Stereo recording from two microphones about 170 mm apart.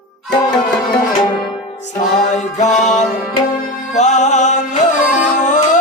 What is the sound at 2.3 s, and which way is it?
Music, 45° left (ahead or behind).